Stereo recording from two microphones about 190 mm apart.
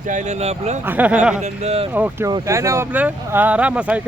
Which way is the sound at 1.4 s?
35° right (ahead or behind).